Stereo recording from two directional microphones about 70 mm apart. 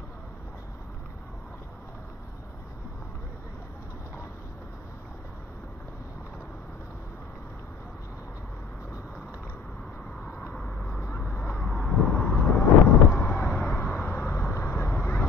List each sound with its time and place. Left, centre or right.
10.8 s vehicle: centre; by 13.4 s left
13.7 s vehicle: left